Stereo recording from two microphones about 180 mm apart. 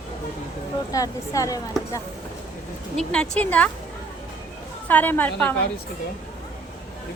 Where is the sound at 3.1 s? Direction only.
5° left (ahead or behind).